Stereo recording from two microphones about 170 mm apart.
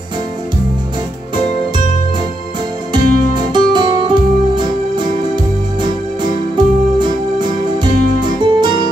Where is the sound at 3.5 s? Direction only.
25° right (ahead or behind).